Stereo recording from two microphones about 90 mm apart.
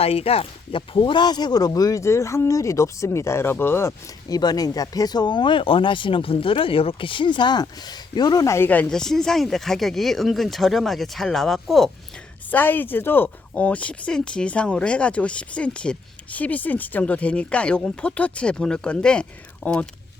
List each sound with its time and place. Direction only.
0.0 s speech: 90° left; by 3.9 s 25° left (ahead or behind)
4.3 s speech: 45° left (ahead or behind)
8.4 s speech: 30° left (ahead or behind)
8.9 s speech: 5° left (ahead or behind)
12.5 s speech: 20° left (ahead or behind)